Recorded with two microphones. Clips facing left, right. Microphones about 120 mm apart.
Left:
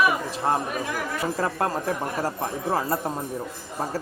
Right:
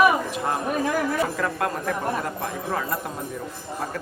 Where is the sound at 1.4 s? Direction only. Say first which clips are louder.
Left 1 dB; 30° left (ahead or behind).